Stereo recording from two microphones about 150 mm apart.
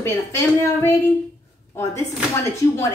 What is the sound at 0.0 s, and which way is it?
A woman's voice, 20° left (ahead or behind).